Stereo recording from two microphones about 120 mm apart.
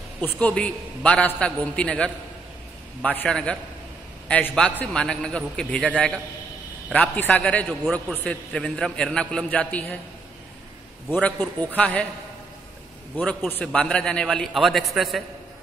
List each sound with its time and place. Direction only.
0.2 s a man's voice: 10° left (ahead or behind)
11.2 s a man's voice: 10° left (ahead or behind)
13.2 s a man's voice: 10° left (ahead or behind)